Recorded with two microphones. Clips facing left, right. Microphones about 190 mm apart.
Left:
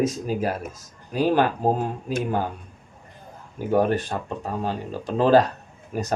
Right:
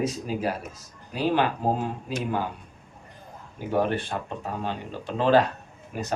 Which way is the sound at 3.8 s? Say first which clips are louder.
Left 4 dB; 40° left (ahead or behind).